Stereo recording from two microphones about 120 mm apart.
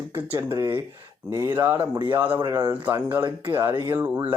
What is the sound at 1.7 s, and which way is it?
Speech, 40° right (ahead or behind).